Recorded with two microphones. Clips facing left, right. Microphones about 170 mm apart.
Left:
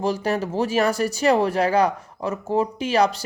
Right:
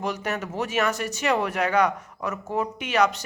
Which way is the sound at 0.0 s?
30° left (ahead or behind).